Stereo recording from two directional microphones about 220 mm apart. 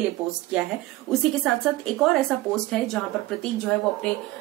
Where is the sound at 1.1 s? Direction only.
Centre (ahead or behind).